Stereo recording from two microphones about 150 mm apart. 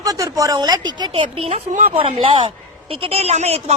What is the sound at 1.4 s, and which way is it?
A woman's voice, 45° right (ahead or behind).